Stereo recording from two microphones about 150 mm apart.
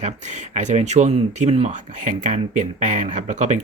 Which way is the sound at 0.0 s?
50° right (ahead or behind).